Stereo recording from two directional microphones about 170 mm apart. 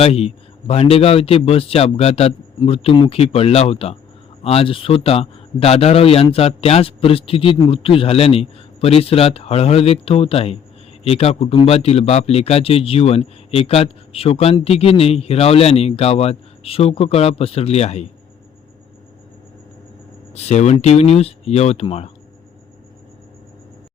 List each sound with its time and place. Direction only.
0.0 s a man's voice: 35° left (ahead or behind)
20.3 s a man's voice: 40° left (ahead or behind)